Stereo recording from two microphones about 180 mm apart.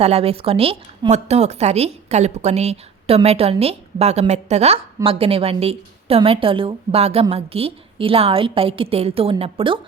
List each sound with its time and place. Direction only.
0.0 s a woman's voice: 35° right (ahead or behind)